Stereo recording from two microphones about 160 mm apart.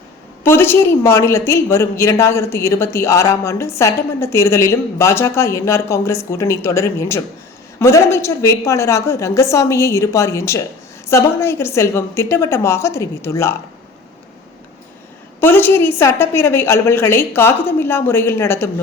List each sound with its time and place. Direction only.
0.4 s a woman's voice: 15° left (ahead or behind)
15.4 s a woman's voice: 15° left (ahead or behind)